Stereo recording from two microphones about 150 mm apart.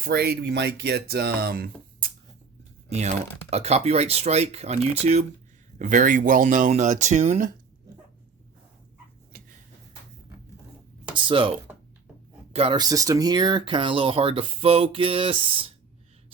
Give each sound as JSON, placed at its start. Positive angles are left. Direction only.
{"t": 0.0, "sound": "speech", "side_deg": -90}
{"t": 2.9, "sound": "speech", "side_deg": -45}
{"t": 5.8, "sound": "speech", "side_deg": -60}
{"t": 9.3, "sound": "a sound", "side_deg": -90}
{"t": 11.1, "sound": "speech", "side_deg": -35}
{"t": 12.5, "sound": "speech", "side_deg": -35}
{"t": 12.8, "sound": "speech", "side_deg": -25}